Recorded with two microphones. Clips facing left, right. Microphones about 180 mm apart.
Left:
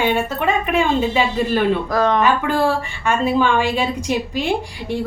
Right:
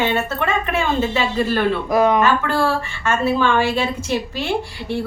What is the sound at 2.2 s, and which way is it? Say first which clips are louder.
A woman's voice: left 1 dB; 15° left (ahead or behind).